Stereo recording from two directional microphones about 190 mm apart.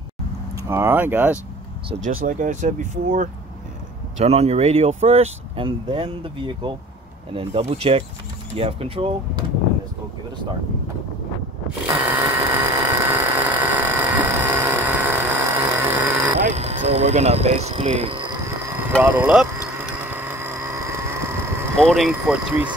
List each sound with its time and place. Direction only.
0.7 s speech: 10° right (ahead or behind)
2.2 s speech: 40° right (ahead or behind)
11.8 s a sound: 10° right (ahead or behind)
16.3 s speech: 35° right (ahead or behind)
18.6 s a sound: 10° right (ahead or behind)
21.8 s speech: centre (ahead or behind)